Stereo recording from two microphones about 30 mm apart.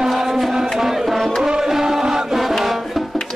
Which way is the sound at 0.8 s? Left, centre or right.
Centre.